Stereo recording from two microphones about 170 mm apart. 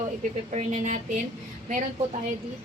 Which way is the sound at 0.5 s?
40° right (ahead or behind).